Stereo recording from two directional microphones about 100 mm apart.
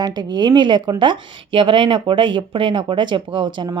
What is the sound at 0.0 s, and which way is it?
A woman's voice, 45° right (ahead or behind).